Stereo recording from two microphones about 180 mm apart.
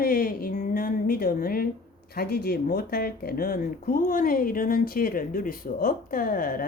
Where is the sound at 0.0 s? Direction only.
55° left (ahead or behind).